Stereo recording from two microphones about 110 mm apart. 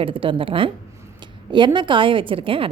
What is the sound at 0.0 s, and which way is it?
A woman's voice, 55° right (ahead or behind).